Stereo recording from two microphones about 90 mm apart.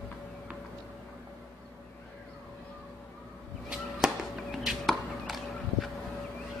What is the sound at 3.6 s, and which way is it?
Chop, 5° right (ahead or behind).